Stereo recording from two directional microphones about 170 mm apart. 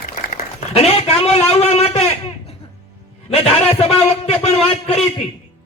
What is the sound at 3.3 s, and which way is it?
A man's voice, 35° left (ahead or behind).